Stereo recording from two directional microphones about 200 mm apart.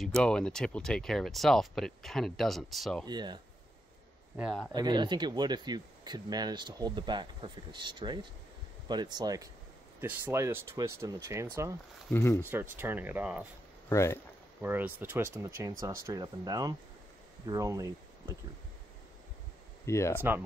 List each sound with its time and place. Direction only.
0.2 s speech: 5° left (ahead or behind)
3.1 s speech: 20° right (ahead or behind)
4.4 s speech: centre (ahead or behind)
4.7 s speech: 20° right (ahead or behind)
12.1 s speech: 15° left (ahead or behind)
12.4 s speech: 10° right (ahead or behind)
13.8 s speech: 15° left (ahead or behind)
14.6 s speech: 10° right (ahead or behind)
19.9 s speech: 15° left (ahead or behind)